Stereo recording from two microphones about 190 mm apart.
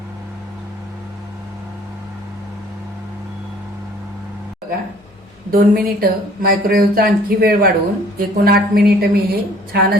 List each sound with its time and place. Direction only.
5.5 s speech: 50° right (ahead or behind)